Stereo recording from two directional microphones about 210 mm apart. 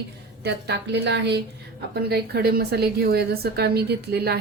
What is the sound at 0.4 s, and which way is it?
A woman's voice, 55° right (ahead or behind).